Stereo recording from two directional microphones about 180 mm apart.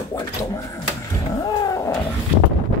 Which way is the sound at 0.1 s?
20° left (ahead or behind).